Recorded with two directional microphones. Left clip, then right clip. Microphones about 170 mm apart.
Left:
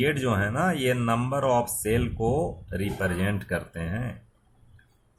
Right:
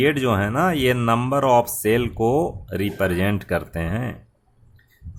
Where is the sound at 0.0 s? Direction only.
55° right (ahead or behind).